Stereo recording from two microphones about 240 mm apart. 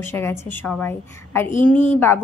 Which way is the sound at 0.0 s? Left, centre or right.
Centre.